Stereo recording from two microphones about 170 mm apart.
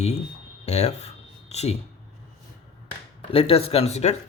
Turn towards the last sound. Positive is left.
turn(degrees=40)  # may be behind; listen again after turning